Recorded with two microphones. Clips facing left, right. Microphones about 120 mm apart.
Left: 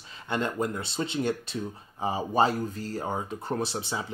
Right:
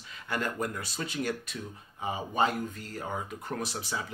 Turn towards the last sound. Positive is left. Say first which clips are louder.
# left 4 dB
turn(degrees=25)  # may be behind; listen again after turning